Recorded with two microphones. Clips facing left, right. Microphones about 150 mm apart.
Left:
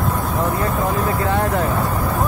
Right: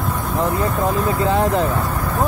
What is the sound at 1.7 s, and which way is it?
Speech, 10° left (ahead or behind).